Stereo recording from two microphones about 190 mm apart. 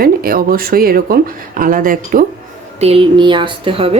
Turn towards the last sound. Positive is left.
turn(degrees=-25)  # may be behind; listen again after turning